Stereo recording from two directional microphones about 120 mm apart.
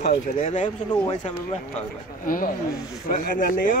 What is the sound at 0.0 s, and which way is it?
Speech, 90° left.